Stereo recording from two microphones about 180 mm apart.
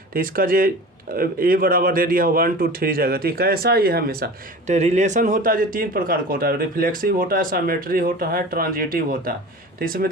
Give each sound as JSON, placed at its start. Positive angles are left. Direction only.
{"t": 0.1, "sound": "speech", "side_deg": -50}
{"t": 4.6, "sound": "speech", "side_deg": -40}